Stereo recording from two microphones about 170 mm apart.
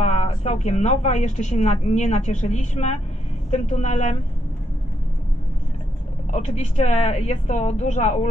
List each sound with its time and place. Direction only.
0.0 s a woman's voice: 40° left (ahead or behind)
6.3 s speech: 45° left (ahead or behind)